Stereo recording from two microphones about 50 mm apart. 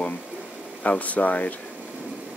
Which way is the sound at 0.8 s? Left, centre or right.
Left.